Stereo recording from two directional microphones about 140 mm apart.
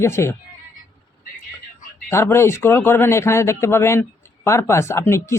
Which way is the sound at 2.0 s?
20° left (ahead or behind).